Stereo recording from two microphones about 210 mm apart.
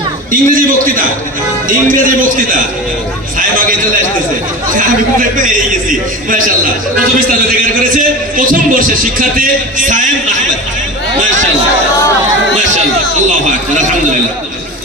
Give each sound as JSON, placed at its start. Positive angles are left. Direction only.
{"t": 0.3, "sound": "a man's voice", "side_deg": -40}
{"t": 7.4, "sound": "a man's voice", "side_deg": -40}